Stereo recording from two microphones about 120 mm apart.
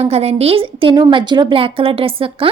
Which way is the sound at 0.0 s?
60° right (ahead or behind).